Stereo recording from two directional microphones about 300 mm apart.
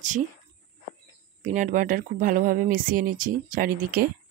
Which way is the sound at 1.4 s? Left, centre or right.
Right.